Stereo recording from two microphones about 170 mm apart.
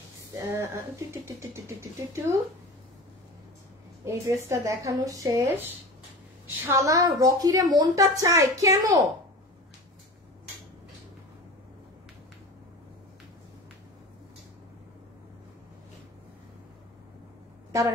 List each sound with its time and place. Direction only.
0.4 s speech: 15° right (ahead or behind)
4.0 s a woman's voice: 15° right (ahead or behind)
6.7 s a woman's voice: 20° right (ahead or behind)